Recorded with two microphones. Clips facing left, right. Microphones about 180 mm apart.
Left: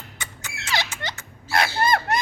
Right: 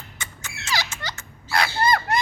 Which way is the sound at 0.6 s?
25° left (ahead or behind).